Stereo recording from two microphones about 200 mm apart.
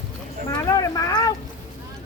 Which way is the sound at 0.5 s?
15° left (ahead or behind).